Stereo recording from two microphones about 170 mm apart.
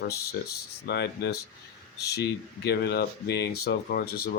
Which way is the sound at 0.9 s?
80° left.